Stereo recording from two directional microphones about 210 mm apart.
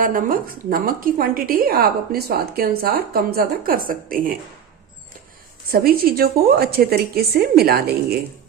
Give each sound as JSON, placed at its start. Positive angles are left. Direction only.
{"t": 0.0, "sound": "a woman's voice", "side_deg": -40}
{"t": 5.7, "sound": "a woman's voice", "side_deg": -45}